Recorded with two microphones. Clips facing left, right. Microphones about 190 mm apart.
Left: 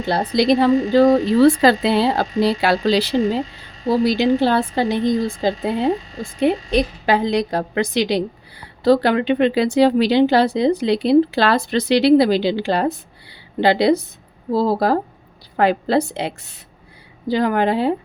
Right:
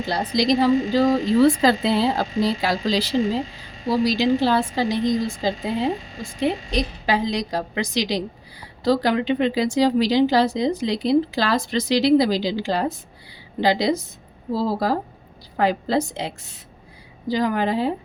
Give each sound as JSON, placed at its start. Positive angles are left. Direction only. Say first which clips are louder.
{"t": 0.1, "sound": "a woman's voice", "louder": "left 4 dB", "side_deg": 60}
{"t": 3.8, "sound": "a woman's voice", "louder": "left 3 dB", "side_deg": 50}